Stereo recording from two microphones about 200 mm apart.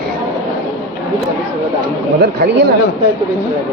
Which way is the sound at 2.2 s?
55° right (ahead or behind).